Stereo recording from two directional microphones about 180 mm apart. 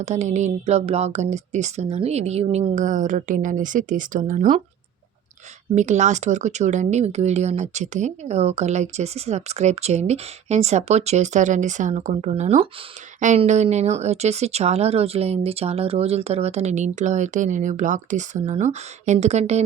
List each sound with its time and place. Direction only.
0.0 s speech: 40° right (ahead or behind)
5.7 s speech: 40° right (ahead or behind)